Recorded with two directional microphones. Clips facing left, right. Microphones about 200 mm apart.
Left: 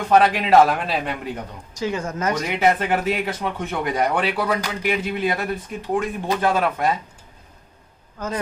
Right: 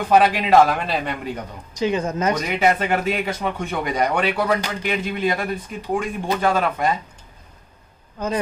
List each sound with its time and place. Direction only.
0.1 s speech: centre (ahead or behind)
1.7 s speech: 20° right (ahead or behind)
2.3 s speech: centre (ahead or behind)
8.2 s speech: 20° right (ahead or behind)